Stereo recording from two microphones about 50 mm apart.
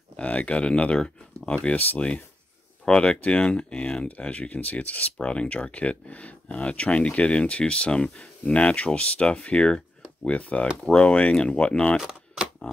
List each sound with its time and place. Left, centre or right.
0.2 s speech: left
2.8 s speech: centre
12.0 s typewriter: centre